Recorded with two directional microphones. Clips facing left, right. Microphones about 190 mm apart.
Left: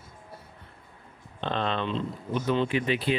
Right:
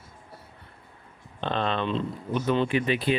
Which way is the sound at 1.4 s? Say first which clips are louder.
Right 2 dB; 55° right (ahead or behind).